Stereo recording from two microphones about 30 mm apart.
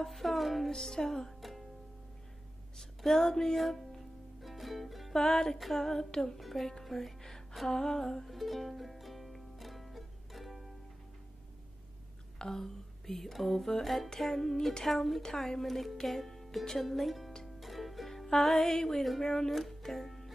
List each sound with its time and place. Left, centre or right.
0.0 s music: centre
0.7 s music: centre
1.4 s music: centre
3.0 s music: centre
5.1 s music: centre
6.4 s music: centre
8.3 s music: centre
12.4 s a sound: centre
14.2 s music: centre
15.2 s music: centre
15.6 s music: centre
19.5 s music: centre